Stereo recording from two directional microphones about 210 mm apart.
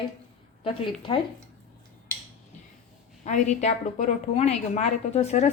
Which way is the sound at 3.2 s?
35° left (ahead or behind).